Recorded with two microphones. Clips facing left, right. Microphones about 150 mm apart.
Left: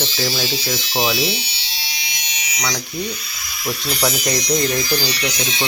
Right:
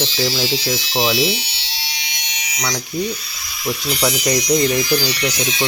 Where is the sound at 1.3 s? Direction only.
90° right.